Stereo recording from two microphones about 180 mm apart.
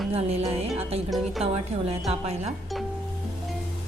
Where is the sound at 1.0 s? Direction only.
Centre (ahead or behind).